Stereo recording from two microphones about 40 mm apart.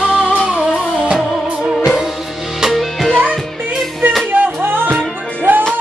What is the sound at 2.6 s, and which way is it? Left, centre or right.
Music, centre.